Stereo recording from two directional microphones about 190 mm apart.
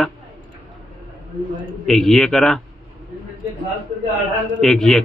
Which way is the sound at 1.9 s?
Centre (ahead or behind).